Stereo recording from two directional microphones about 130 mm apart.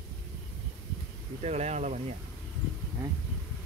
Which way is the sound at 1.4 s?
55° right (ahead or behind).